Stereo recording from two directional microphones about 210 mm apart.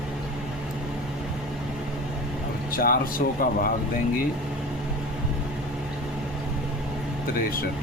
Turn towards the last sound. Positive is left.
turn(degrees=45)  # may be behind; listen again after turning